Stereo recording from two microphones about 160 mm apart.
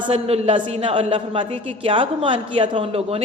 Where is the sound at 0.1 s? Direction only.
35° right (ahead or behind).